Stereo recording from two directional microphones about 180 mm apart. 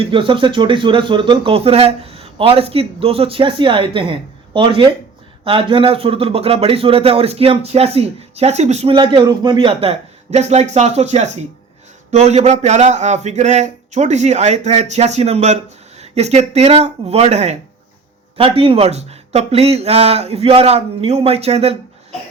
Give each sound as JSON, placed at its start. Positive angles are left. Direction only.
{"t": 0.0, "sound": "a man's voice", "side_deg": -30}